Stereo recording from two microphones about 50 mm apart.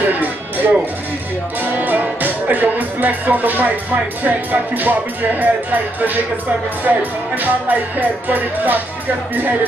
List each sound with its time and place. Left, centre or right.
0.0 s music: right
1.6 s speech: right